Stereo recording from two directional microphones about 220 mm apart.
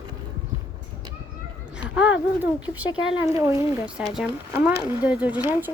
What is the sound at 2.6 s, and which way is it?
A woman's voice, 5° right (ahead or behind).